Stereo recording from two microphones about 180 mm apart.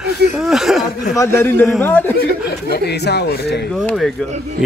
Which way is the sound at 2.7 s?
65° left (ahead or behind).